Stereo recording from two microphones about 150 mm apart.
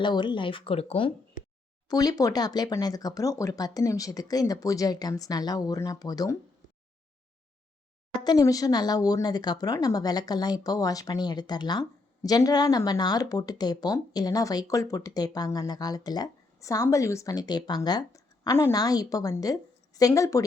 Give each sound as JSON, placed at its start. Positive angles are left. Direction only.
{"t": 0.0, "sound": "speech", "side_deg": 30}
{"t": 1.9, "sound": "speech", "side_deg": 25}
{"t": 8.2, "sound": "speech", "side_deg": 25}